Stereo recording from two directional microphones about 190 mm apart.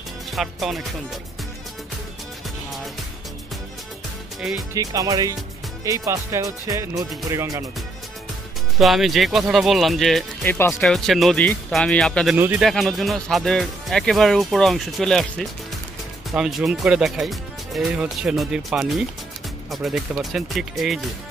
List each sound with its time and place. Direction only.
0.3 s speech: centre (ahead or behind)
4.4 s speech: centre (ahead or behind)
4.7 s speech: 20° right (ahead or behind)
8.7 s speech: centre (ahead or behind)
12.4 s speech: 10° right (ahead or behind)
12.6 s speech: centre (ahead or behind)